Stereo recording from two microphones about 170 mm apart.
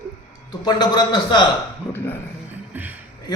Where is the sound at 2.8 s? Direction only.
10° right (ahead or behind).